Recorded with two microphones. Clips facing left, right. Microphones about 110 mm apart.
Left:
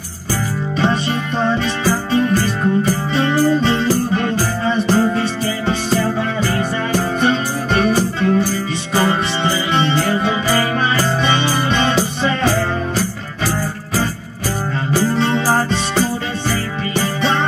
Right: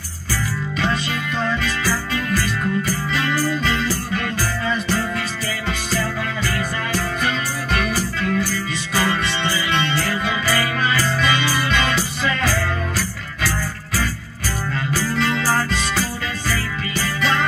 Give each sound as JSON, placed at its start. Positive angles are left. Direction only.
{"t": 1.4, "sound": "music", "side_deg": 35}
{"t": 14.9, "sound": "music", "side_deg": 25}